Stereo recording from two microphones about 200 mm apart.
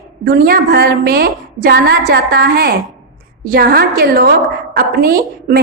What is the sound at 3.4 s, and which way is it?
A woman's voice, 45° right (ahead or behind).